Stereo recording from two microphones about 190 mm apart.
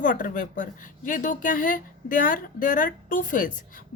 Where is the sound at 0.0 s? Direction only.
45° left (ahead or behind).